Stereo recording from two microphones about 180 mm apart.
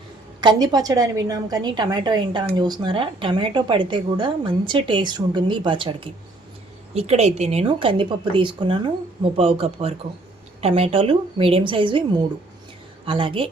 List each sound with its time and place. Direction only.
0.4 s a woman's voice: 20° right (ahead or behind)
13.1 s a woman's voice: 30° right (ahead or behind)